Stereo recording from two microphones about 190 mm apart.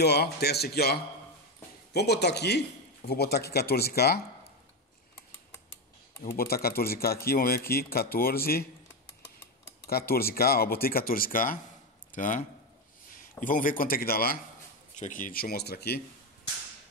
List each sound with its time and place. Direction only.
0.0 s speech: 60° left (ahead or behind)
2.0 s speech: 60° left (ahead or behind)
6.3 s speech: 55° left (ahead or behind)
9.8 s speech: 55° left (ahead or behind)